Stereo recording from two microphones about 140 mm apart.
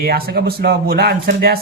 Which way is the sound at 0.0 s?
90° right.